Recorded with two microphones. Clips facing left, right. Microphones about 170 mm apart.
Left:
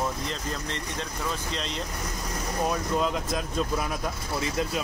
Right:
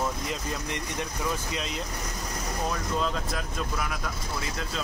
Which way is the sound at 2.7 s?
15° left (ahead or behind).